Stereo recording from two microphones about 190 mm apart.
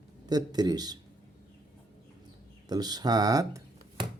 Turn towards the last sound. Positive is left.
turn(degrees=-20)  # may be behind; listen again after turning